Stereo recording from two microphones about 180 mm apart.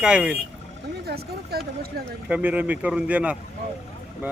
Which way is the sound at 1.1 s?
60° right (ahead or behind).